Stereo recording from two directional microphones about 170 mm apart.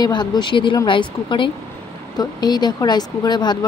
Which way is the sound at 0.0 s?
25° left (ahead or behind).